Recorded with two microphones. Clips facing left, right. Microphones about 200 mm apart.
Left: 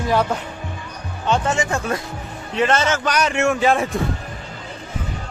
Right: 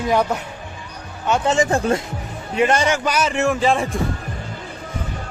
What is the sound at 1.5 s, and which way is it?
Speech, 35° right (ahead or behind).